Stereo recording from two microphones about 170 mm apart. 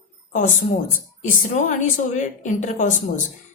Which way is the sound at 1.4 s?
50° left (ahead or behind).